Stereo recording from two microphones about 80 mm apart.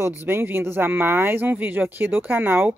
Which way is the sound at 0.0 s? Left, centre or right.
Right.